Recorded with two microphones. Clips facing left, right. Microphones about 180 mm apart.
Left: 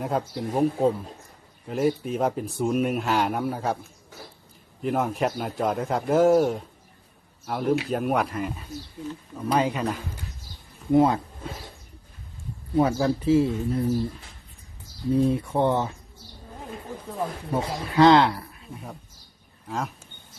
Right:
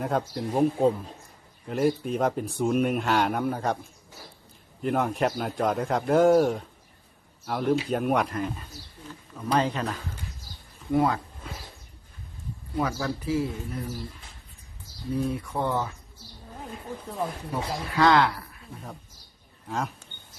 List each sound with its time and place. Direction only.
0.0 s speech: centre (ahead or behind)
4.8 s speech: centre (ahead or behind); by 11.2 s 20° left (ahead or behind)
12.7 s speech: 30° left (ahead or behind)
15.1 s speech: 25° left (ahead or behind)
17.5 s speech: 25° left (ahead or behind)
19.6 s speech: centre (ahead or behind)